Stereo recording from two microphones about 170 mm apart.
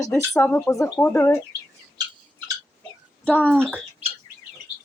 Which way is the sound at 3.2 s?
10° left (ahead or behind).